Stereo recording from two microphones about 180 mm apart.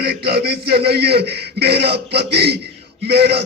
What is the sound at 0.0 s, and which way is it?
A man's voice, 60° right (ahead or behind).